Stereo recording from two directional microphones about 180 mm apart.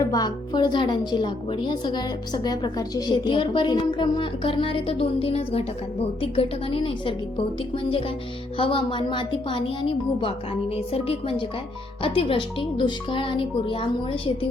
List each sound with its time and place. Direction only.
0.0 s a woman's voice: 20° left (ahead or behind)